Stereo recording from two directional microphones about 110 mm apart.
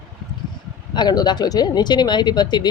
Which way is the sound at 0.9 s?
40° left (ahead or behind).